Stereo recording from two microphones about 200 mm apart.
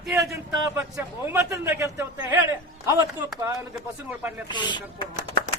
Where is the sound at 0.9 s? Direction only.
15° right (ahead or behind).